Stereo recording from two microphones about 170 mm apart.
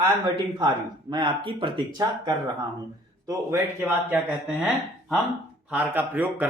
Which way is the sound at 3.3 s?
15° right (ahead or behind).